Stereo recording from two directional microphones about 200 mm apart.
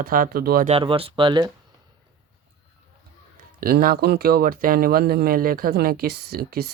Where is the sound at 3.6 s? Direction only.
45° right (ahead or behind).